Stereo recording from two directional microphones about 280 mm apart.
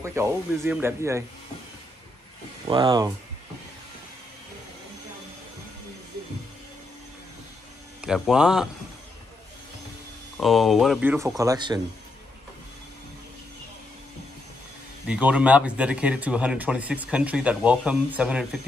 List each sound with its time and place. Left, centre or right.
0.0 s speech: centre
2.7 s speech: centre
8.0 s speech: centre
10.4 s speech: centre
15.0 s speech: centre